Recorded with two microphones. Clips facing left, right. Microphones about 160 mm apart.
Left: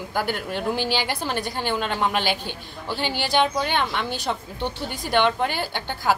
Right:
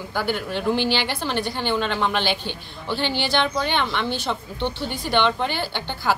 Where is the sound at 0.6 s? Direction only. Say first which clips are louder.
Right 4 dB; 45° left (ahead or behind).